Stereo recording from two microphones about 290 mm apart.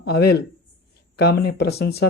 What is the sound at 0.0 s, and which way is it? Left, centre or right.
Speech, left.